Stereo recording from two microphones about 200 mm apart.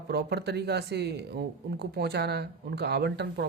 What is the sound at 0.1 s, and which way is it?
Speech, 55° right (ahead or behind).